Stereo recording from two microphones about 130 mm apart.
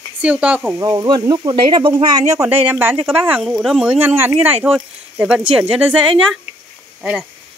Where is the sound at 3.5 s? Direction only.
5° right (ahead or behind).